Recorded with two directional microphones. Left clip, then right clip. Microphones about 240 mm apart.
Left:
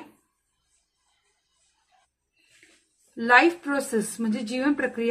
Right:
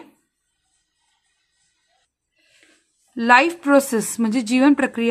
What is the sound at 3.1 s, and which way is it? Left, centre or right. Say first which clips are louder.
Speech: right 4 dB; right.